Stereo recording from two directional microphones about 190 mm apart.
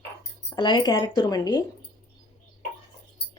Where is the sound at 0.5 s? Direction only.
25° left (ahead or behind).